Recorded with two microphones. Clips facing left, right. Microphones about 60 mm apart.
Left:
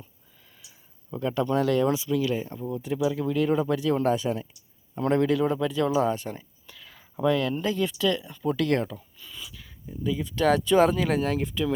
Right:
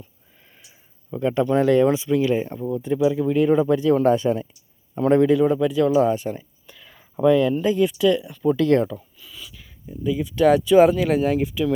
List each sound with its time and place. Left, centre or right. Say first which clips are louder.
0.4 s a sound: right 3 dB; right
1.1 s speech: right 5 dB; right
4.0 s speech: right 6 dB; right
4.9 s speech: right 6 dB; right
5.5 s speech: right 6 dB; centre
6.7 s a sound: right 2 dB; right
7.2 s speech: right 7 dB; right
8.4 s speech: right 7 dB; right
9.2 s speech: right 1 dB; centre